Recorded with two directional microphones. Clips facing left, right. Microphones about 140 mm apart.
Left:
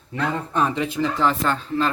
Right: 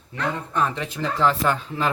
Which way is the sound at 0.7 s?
5° left (ahead or behind).